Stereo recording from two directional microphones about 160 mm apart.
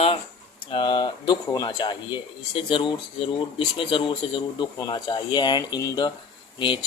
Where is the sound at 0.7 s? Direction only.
30° left (ahead or behind).